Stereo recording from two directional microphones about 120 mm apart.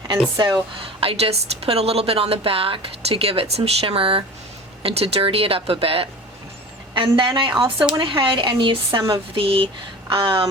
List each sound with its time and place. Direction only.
0.3 s speech: 40° right (ahead or behind)
1.2 s speech: 55° right (ahead or behind)